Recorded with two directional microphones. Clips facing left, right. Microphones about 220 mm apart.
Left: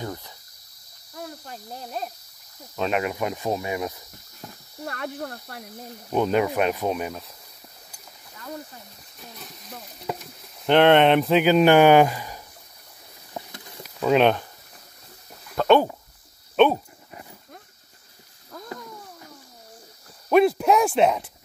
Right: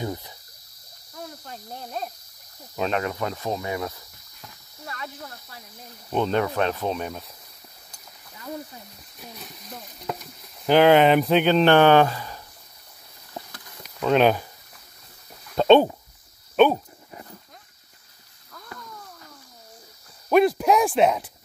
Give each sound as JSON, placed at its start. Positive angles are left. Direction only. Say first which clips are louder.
{"t": 0.0, "sound": "cricket", "louder": "right 3 dB", "side_deg": -15}
{"t": 1.5, "sound": "speech", "louder": "right 1 dB", "side_deg": 5}
{"t": 2.9, "sound": "speech", "louder": "left 3 dB", "side_deg": 15}
{"t": 4.8, "sound": "speech", "louder": "left 6 dB", "side_deg": 55}
{"t": 6.1, "sound": "speech", "louder": "left 2 dB", "side_deg": 10}
{"t": 9.2, "sound": "sizzle", "louder": "right 1 dB", "side_deg": 0}
{"t": 13.5, "sound": "a sound", "louder": "left 4 dB", "side_deg": 25}
{"t": 13.8, "sound": "speech", "louder": "even", "side_deg": 0}
{"t": 15.5, "sound": "speech", "louder": "right 3 dB", "side_deg": -20}
{"t": 16.5, "sound": "speech", "louder": "even", "side_deg": 0}
{"t": 20.2, "sound": "speech", "louder": "even", "side_deg": 0}